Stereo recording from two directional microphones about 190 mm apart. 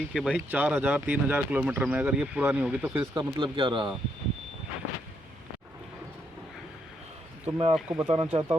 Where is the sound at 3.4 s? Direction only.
25° right (ahead or behind).